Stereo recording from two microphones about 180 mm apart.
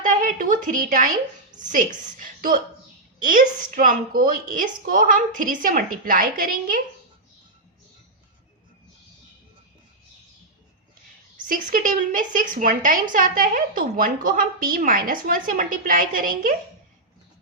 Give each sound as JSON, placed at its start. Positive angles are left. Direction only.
{"t": 0.0, "sound": "a woman's voice", "side_deg": -45}
{"t": 11.4, "sound": "a woman's voice", "side_deg": -50}